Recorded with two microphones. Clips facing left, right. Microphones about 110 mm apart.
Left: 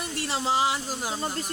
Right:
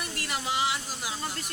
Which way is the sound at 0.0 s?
25° left (ahead or behind).